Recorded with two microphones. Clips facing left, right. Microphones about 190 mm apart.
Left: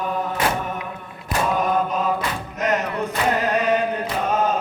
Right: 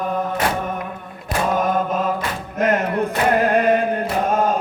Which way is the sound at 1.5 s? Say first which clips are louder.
Right 2 dB; 45° right (ahead or behind).